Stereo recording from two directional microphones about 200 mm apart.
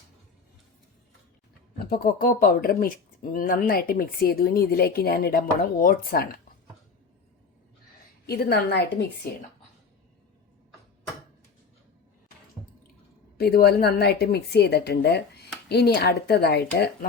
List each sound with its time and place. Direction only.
1.8 s speech: 50° left (ahead or behind)
8.3 s a woman's voice: 55° left (ahead or behind)
13.3 s speech: 50° left (ahead or behind)